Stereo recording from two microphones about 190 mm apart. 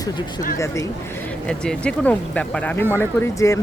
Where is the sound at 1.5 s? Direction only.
5° left (ahead or behind).